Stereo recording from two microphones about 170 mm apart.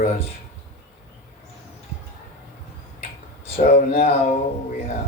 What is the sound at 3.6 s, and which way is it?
Speech, 40° left (ahead or behind).